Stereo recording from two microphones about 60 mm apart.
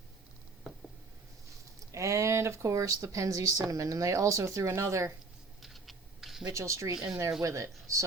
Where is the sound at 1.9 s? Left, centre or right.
Right.